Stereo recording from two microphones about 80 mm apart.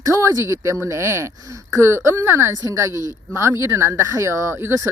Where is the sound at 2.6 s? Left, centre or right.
Right.